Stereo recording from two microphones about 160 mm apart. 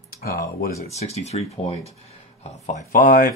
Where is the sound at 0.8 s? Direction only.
40° left (ahead or behind).